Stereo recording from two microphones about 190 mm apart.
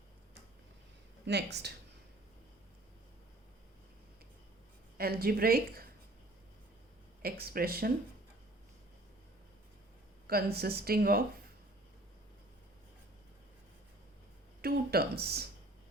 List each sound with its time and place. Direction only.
1.2 s speech: 60° right (ahead or behind)
4.9 s a woman's voice: 55° right (ahead or behind)
7.2 s a woman's voice: 55° right (ahead or behind)
10.2 s a woman's voice: 55° right (ahead or behind)
14.6 s speech: 55° right (ahead or behind)